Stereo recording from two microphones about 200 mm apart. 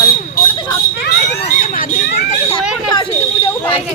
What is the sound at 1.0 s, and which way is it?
Children playing, 55° left (ahead or behind).